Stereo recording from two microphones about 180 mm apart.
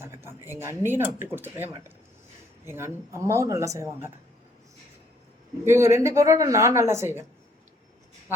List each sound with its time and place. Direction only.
0.0 s speech: 15° right (ahead or behind)
5.6 s speech: 15° right (ahead or behind)